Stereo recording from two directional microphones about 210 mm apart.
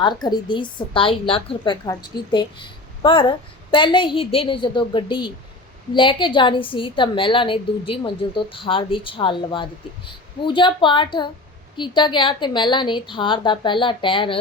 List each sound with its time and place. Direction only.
0.0 s a woman's voice: 20° left (ahead or behind)